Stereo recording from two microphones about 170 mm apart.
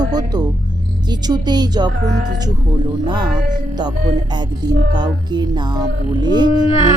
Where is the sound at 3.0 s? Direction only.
25° right (ahead or behind).